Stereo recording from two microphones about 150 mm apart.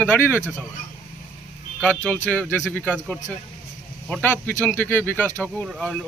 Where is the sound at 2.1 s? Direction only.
5° left (ahead or behind).